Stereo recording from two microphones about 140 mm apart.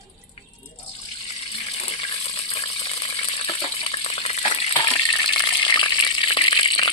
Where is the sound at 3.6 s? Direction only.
40° left (ahead or behind).